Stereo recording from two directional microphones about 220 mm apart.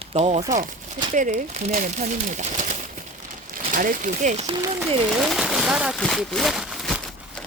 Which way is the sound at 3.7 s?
35° right (ahead or behind).